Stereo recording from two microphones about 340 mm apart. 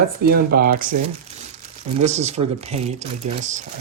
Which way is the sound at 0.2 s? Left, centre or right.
Right.